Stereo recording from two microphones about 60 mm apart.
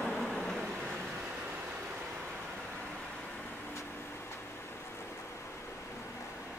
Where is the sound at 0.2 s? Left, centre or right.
Centre.